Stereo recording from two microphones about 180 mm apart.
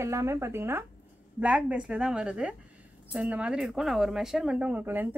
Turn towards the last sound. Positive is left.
turn(degrees=-10)  # may be behind; listen again after turning